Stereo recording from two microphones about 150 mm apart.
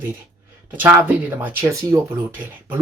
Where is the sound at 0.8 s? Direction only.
15° right (ahead or behind).